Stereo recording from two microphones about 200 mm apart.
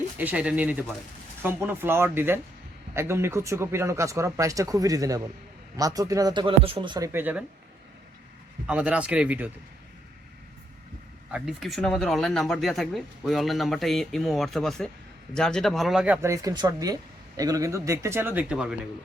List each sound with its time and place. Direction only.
0.2 s speech: 5° right (ahead or behind); by 7.1 s 20° right (ahead or behind)
7.1 s speech: 10° right (ahead or behind)
8.6 s speech: 5° right (ahead or behind)
11.3 s speech: 5° right (ahead or behind)